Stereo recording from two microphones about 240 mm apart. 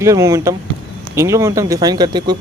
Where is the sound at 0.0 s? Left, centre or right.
Centre.